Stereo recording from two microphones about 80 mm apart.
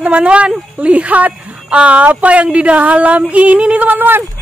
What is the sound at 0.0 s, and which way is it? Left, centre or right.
A woman's voice, centre.